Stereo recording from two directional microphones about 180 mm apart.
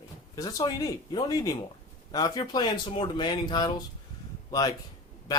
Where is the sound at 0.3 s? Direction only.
20° left (ahead or behind).